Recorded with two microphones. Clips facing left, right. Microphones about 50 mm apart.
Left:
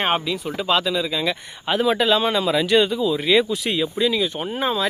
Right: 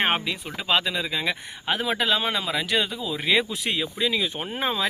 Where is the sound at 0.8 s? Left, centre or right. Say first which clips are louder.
Left 4 dB; right.